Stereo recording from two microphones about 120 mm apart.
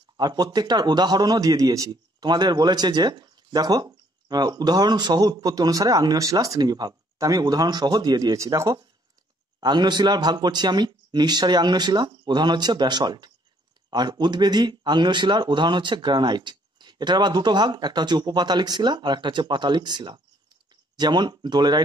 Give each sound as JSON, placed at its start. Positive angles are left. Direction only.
{"t": 0.2, "sound": "a man's voice", "side_deg": -35}